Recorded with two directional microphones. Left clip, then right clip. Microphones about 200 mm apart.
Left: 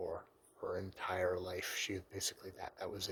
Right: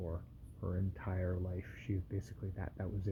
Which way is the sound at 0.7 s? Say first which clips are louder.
Left 6 dB; 30° left (ahead or behind).